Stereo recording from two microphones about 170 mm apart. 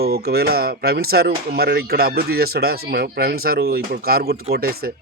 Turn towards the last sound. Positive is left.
turn(degrees=-60)  # may be behind; listen again after turning